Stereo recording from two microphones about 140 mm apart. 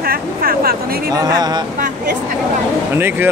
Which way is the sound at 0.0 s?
90° right.